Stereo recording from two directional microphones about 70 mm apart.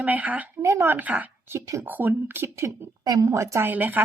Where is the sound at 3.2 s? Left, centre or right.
Right.